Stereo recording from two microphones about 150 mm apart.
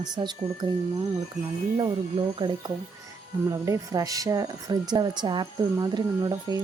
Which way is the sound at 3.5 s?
20° right (ahead or behind).